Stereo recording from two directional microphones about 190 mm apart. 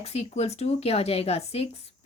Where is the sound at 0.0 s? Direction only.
35° left (ahead or behind).